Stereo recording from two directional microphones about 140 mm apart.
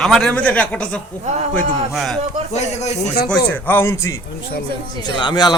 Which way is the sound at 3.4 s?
15° left (ahead or behind).